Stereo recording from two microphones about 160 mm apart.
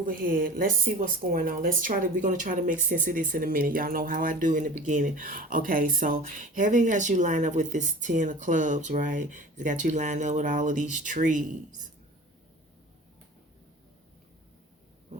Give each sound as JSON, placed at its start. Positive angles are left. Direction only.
{"t": 0.0, "sound": "speech", "side_deg": -60}